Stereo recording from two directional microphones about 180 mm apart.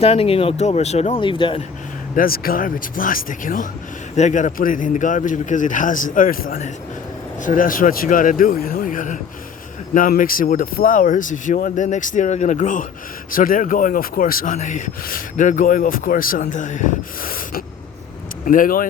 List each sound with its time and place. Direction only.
0.0 s speech: 35° left (ahead or behind)
2.1 s speech: 55° left (ahead or behind)